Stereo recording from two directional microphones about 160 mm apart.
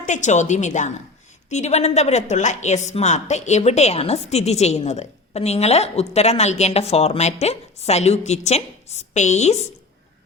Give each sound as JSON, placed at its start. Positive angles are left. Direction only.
{"t": 0.0, "sound": "a woman's voice", "side_deg": 50}